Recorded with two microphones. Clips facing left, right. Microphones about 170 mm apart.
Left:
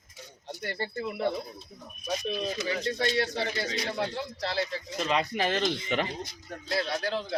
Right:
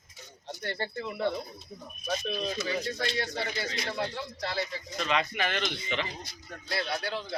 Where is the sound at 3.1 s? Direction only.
30° left (ahead or behind).